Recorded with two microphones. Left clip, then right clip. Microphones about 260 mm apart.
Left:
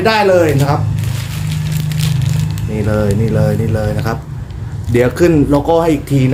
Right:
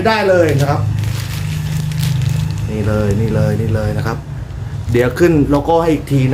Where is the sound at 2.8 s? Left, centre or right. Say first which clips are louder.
Left 2 dB; centre.